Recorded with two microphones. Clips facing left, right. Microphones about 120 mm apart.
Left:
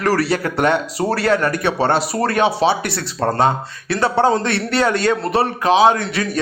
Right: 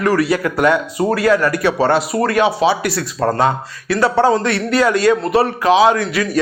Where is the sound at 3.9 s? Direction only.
25° left (ahead or behind).